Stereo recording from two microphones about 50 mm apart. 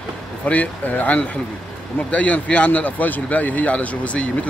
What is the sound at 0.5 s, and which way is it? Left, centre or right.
A man's voice, left.